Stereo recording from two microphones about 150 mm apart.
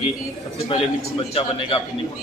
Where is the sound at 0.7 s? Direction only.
40° left (ahead or behind).